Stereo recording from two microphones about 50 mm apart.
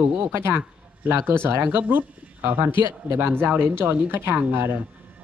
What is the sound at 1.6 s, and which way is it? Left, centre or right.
Speech, right.